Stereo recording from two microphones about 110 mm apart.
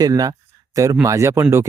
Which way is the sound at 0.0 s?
30° right (ahead or behind).